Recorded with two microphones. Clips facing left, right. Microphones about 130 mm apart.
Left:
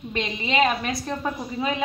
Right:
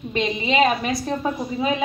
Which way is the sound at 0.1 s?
20° right (ahead or behind).